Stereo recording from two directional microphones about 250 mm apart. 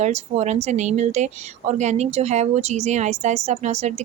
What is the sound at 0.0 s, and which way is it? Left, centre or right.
Speech, right.